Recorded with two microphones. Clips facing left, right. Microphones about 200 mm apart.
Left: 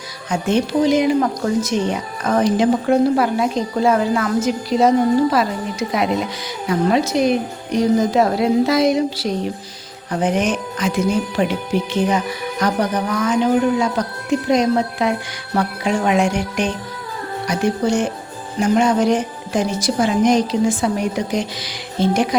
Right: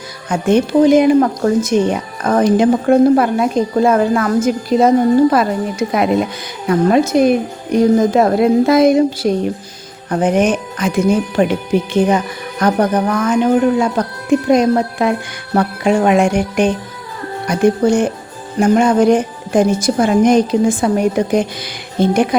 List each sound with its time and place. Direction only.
0.3 s speech: 55° right (ahead or behind)
5.9 s speech: 55° right (ahead or behind)